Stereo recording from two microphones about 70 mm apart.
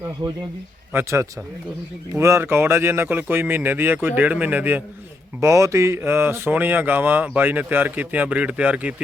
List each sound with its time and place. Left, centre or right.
0.9 s speech: right
5.4 s speech: right; by 9.0 s centre